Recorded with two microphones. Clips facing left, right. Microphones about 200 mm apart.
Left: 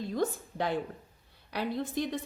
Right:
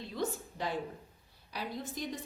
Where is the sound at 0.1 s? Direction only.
60° left (ahead or behind).